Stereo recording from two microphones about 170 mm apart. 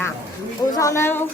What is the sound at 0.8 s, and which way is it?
Speech, 15° left (ahead or behind).